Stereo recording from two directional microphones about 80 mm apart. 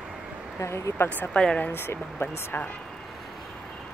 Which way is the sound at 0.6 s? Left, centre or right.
Left.